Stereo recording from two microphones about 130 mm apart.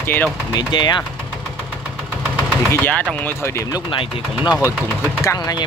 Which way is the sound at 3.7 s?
35° left (ahead or behind).